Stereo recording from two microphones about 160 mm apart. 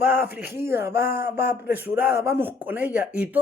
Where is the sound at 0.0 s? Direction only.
10° right (ahead or behind).